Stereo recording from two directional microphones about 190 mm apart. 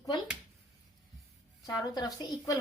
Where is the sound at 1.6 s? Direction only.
20° left (ahead or behind).